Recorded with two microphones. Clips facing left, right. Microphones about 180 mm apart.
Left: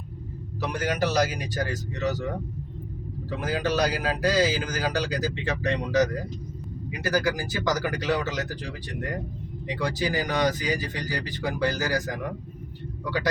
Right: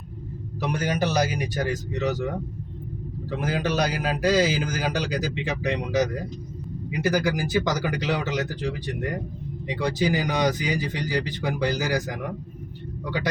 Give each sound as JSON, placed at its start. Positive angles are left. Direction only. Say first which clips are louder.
{"t": 0.6, "sound": "a man's voice", "louder": "right 1 dB", "side_deg": -20}
{"t": 3.2, "sound": "a man's voice", "louder": "right 1 dB", "side_deg": -20}
{"t": 9.6, "sound": "a man's voice", "louder": "right 3 dB", "side_deg": -20}